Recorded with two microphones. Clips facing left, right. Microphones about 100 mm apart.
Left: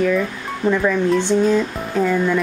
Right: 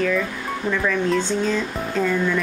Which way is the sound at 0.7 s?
20° left (ahead or behind).